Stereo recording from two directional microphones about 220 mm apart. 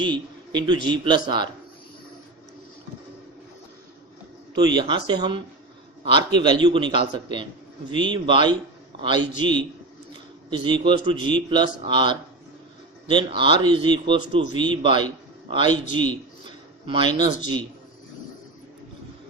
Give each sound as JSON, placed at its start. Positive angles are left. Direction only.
{"t": 0.0, "sound": "a man's voice", "side_deg": -20}
{"t": 4.5, "sound": "a man's voice", "side_deg": -20}
{"t": 10.6, "sound": "a man's voice", "side_deg": -20}